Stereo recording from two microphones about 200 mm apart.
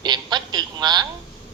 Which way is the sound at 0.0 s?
20° right (ahead or behind).